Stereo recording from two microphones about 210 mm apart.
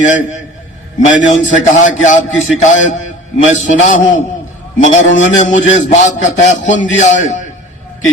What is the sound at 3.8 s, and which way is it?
Speech, 35° left (ahead or behind).